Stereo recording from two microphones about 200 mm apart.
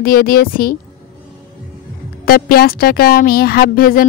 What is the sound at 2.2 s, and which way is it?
Speech, 50° left (ahead or behind).